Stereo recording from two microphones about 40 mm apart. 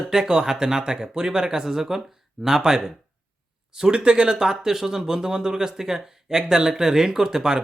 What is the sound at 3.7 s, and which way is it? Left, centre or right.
Speech, right.